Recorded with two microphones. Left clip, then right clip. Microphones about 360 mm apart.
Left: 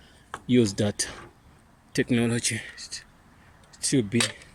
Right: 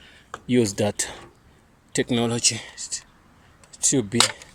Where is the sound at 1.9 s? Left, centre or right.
Right.